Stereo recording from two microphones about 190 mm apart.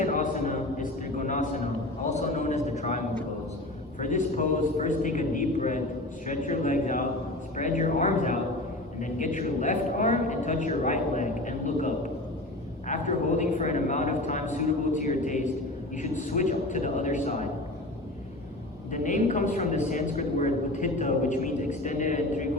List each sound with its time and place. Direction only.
0.0 s a sound: 40° left (ahead or behind)
4.0 s a woman's voice: 40° left (ahead or behind)
18.9 s a woman's voice: 40° left (ahead or behind)